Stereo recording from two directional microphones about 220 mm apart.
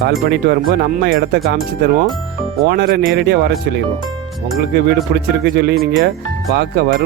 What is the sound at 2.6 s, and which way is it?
Speech, 45° right (ahead or behind).